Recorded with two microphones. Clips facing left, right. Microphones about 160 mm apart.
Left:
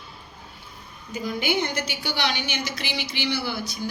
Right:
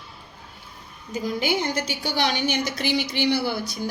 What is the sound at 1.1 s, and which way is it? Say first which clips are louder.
A woman's voice: right 1 dB; 40° right (ahead or behind).